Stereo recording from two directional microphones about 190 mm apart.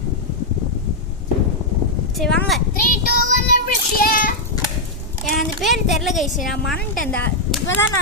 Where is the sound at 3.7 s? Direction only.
50° left (ahead or behind).